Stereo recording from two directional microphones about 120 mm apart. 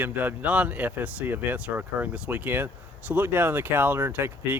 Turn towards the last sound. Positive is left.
turn(degrees=-20)  # may be behind; listen again after turning